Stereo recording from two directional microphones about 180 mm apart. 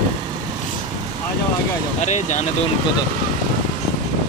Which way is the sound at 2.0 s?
40° left (ahead or behind).